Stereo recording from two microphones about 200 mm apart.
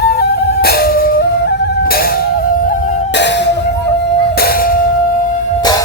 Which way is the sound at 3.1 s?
60° left (ahead or behind).